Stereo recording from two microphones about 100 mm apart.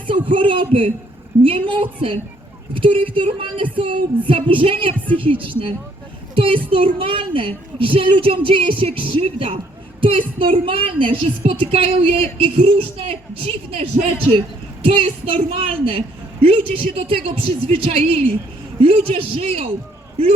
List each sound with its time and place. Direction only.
0.3 s a child's voice: 55° right (ahead or behind)
11.7 s a woman's voice: 75° right (ahead or behind)
14.8 s a woman's voice: 65° right (ahead or behind)